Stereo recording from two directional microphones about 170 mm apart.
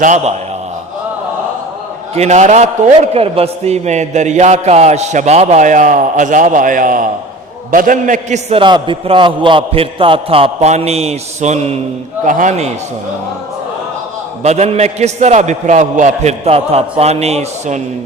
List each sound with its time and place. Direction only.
0.0 s a man's voice: 45° right (ahead or behind)
2.1 s a man's voice: 40° right (ahead or behind)
14.4 s a man's voice: 40° right (ahead or behind)